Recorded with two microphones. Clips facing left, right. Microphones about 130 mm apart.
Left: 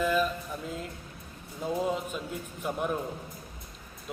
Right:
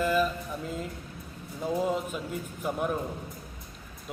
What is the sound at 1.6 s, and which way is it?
Speech, 5° right (ahead or behind).